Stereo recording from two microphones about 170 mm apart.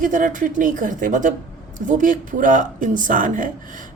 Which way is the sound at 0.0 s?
50° right (ahead or behind).